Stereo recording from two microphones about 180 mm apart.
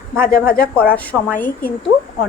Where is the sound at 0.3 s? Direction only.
55° left (ahead or behind).